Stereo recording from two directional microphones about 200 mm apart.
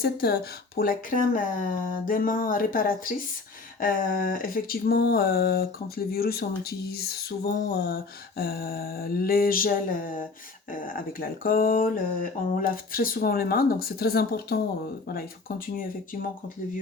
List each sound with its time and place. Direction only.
0.0 s speech: 50° left (ahead or behind)